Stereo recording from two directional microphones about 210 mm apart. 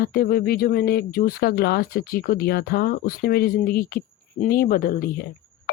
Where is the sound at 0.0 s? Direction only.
45° left (ahead or behind).